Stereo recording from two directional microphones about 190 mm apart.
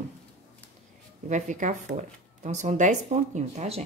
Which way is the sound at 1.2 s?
40° right (ahead or behind).